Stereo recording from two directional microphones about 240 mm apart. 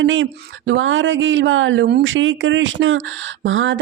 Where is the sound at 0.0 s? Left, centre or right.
Right.